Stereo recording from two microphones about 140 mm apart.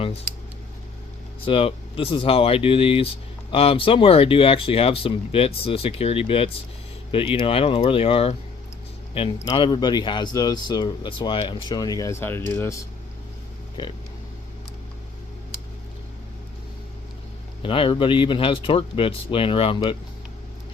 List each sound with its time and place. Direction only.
1.5 s speech: 40° left (ahead or behind); by 12.8 s 20° left (ahead or behind)
13.8 s speech: 30° left (ahead or behind)
17.6 s speech: 40° left (ahead or behind)